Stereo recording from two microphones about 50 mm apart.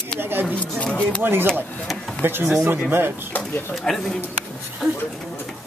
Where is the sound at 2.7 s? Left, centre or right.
Right.